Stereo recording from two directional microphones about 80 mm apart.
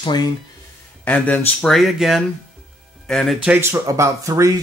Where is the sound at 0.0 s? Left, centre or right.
Left.